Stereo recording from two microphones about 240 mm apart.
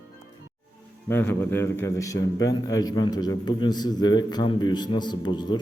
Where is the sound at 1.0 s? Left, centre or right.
Centre.